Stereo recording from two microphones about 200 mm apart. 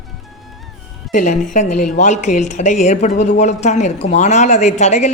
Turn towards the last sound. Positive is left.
turn(degrees=35)  # may be behind; listen again after turning